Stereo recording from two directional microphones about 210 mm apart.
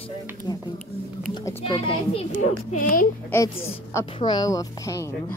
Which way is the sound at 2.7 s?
40° left (ahead or behind).